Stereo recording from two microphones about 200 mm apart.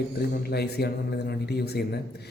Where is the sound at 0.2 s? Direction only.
55° left (ahead or behind).